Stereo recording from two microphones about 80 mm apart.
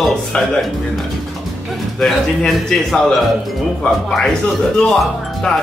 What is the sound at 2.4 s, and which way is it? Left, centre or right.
Music, centre.